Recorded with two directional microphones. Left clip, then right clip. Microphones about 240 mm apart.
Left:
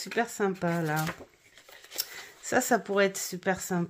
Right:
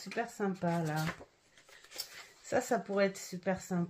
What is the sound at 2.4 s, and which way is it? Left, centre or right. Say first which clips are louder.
Speech: left 6 dB; left.